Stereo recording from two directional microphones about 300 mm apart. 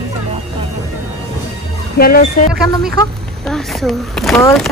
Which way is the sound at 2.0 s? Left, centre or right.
Left.